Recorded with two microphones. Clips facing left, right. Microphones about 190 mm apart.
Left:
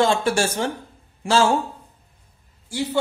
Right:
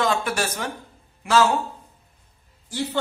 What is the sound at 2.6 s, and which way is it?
Speech, 10° left (ahead or behind).